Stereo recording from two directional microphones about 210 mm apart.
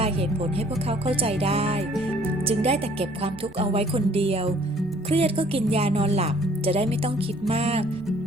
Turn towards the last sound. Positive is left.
turn(degrees=-30)  # may be behind; listen again after turning